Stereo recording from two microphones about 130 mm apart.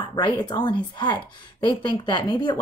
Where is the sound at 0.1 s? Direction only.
35° left (ahead or behind).